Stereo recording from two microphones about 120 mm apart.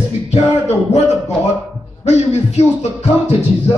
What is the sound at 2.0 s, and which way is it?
Music, 65° left (ahead or behind).